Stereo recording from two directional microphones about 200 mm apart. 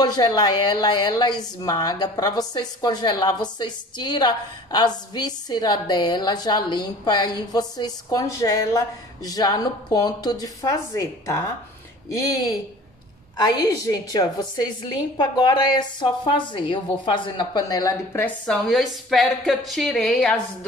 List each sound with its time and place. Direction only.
0.0 s a woman's voice: 20° left (ahead or behind); by 20.3 s centre (ahead or behind)